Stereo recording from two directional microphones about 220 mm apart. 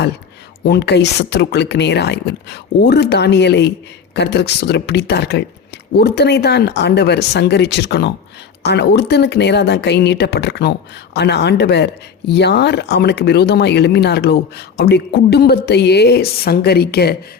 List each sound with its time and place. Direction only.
0.6 s speech: 50° left (ahead or behind)